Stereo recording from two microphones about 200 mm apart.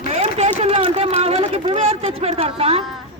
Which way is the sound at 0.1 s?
35° right (ahead or behind).